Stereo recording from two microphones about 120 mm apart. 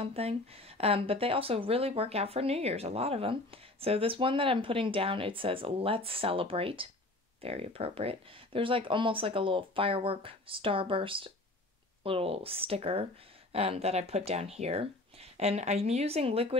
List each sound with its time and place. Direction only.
0.0 s speech: 55° right (ahead or behind)